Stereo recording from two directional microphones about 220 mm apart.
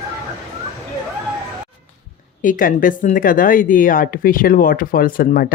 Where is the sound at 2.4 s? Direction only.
40° left (ahead or behind).